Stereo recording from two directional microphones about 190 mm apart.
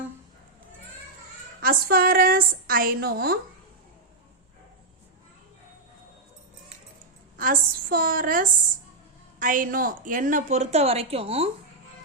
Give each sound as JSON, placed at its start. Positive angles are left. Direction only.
{"t": 1.6, "sound": "a woman's voice", "side_deg": -50}
{"t": 7.3, "sound": "a woman's voice", "side_deg": -45}